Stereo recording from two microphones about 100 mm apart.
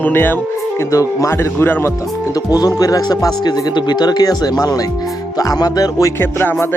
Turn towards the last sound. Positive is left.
turn(degrees=20)  # may be behind; listen again after turning